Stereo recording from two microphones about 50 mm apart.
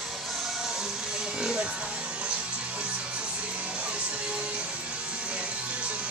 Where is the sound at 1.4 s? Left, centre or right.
Centre.